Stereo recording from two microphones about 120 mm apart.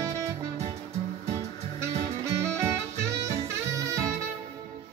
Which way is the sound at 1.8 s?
25° right (ahead or behind).